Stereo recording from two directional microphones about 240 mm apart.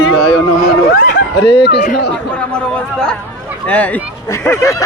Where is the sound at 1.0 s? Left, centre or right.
Left.